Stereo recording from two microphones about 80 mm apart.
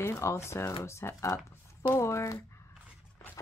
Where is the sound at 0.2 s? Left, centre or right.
Left.